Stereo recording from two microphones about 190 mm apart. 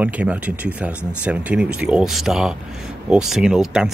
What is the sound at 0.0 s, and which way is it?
Speech, 10° right (ahead or behind).